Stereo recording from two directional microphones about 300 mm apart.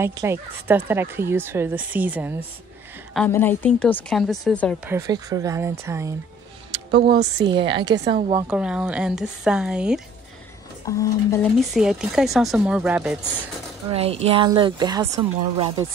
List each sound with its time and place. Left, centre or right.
0.0 s speech: centre
3.2 s speech: centre
4.9 s speech: centre
7.2 s speech: centre
8.5 s speech: centre
10.9 s speech: centre
11.5 s speech: centre
13.9 s speech: centre